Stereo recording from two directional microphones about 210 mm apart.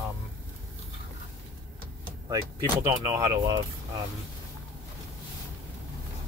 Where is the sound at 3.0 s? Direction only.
20° right (ahead or behind).